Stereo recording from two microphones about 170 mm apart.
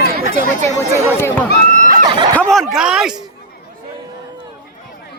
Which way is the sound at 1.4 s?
55° left (ahead or behind).